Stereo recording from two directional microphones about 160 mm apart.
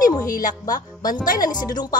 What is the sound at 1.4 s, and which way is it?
Speech, 25° left (ahead or behind).